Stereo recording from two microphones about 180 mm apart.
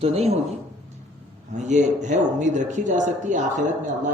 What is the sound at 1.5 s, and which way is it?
A woman's voice, 40° right (ahead or behind).